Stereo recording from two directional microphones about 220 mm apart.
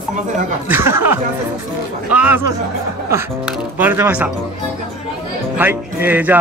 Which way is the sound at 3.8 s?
10° right (ahead or behind).